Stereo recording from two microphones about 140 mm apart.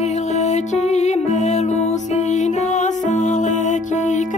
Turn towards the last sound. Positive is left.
turn(degrees=60)  # may be behind; listen again after turning